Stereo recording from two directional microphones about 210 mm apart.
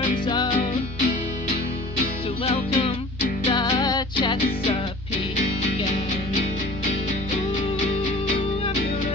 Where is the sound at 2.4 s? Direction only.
30° left (ahead or behind).